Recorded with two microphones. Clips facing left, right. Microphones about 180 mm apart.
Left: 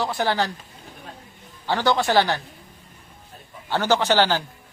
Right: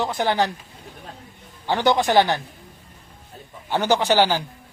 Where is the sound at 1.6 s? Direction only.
15° right (ahead or behind).